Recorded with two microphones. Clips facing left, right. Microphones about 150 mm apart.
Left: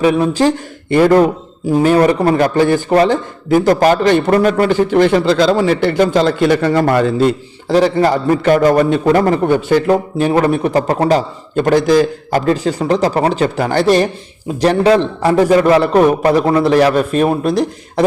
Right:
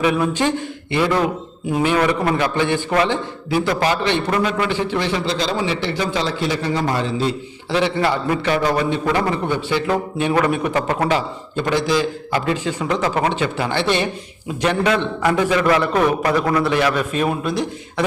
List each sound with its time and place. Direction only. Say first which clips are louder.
0.0 s a man's voice: left 6 dB; 35° left (ahead or behind)